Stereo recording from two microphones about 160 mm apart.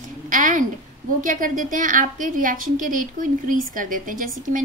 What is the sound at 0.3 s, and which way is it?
A woman's voice, 55° right (ahead or behind).